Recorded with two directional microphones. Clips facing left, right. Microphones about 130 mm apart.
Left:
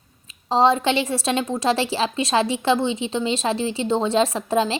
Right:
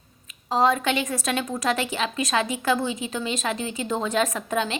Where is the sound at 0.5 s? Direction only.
30° left (ahead or behind).